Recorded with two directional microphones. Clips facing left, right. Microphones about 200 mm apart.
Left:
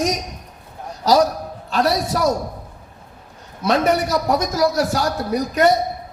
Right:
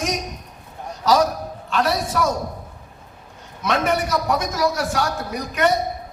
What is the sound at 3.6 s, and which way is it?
A man's voice, 35° left (ahead or behind).